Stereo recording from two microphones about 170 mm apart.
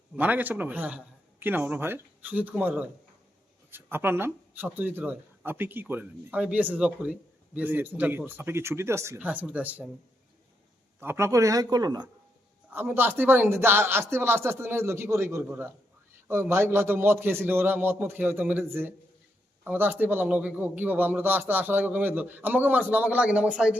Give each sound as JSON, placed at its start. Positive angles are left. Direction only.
{"t": 0.2, "sound": "speech", "side_deg": -10}
{"t": 11.0, "sound": "speech", "side_deg": -15}
{"t": 12.7, "sound": "speech", "side_deg": -15}